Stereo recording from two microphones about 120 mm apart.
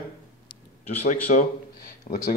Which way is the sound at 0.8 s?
70° left (ahead or behind).